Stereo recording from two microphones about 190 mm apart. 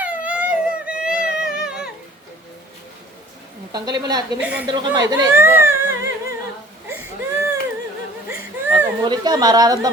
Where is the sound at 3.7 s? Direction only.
20° right (ahead or behind).